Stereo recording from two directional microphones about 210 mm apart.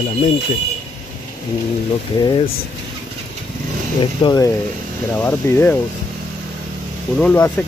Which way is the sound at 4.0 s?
20° left (ahead or behind).